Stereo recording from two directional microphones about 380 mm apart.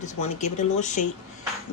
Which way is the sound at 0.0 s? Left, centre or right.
Centre.